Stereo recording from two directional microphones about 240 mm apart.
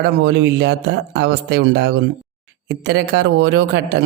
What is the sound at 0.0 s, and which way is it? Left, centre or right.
Speech, right.